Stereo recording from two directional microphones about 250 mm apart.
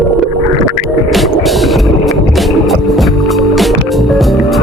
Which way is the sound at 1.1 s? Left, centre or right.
Centre.